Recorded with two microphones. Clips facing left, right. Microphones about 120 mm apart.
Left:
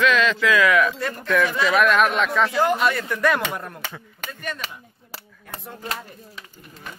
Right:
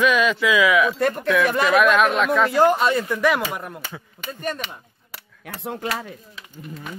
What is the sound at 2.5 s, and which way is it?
Speech, 35° right (ahead or behind).